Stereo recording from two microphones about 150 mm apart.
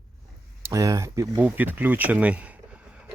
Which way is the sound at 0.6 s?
20° right (ahead or behind).